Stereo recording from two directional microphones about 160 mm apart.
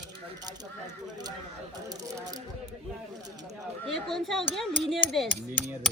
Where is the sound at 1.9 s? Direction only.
25° right (ahead or behind).